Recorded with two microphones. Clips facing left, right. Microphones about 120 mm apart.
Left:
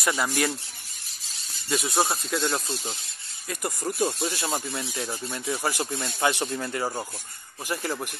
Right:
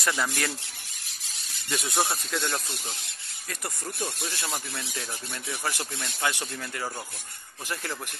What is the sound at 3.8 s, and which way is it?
Speech, 25° left (ahead or behind).